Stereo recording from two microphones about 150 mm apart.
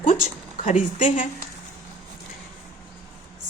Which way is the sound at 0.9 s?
55° left (ahead or behind).